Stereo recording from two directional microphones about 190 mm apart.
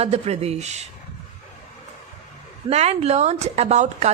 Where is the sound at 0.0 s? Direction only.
35° right (ahead or behind).